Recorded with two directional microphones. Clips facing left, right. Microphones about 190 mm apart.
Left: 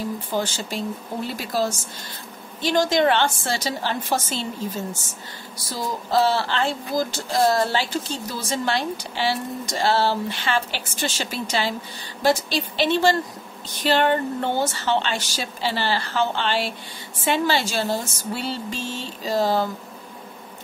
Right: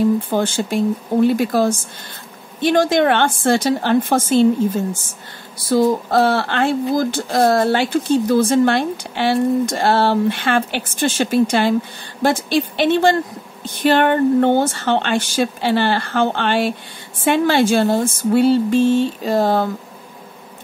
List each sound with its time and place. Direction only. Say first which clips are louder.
0.3 s a woman's voice: right 7 dB; 55° right (ahead or behind)